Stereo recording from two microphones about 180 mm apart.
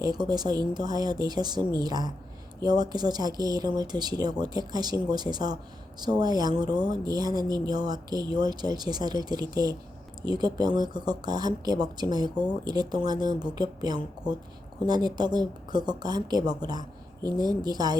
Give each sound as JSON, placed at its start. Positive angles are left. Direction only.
{"t": 0.0, "sound": "speech", "side_deg": -20}